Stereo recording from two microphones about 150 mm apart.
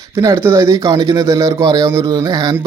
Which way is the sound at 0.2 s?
20° right (ahead or behind).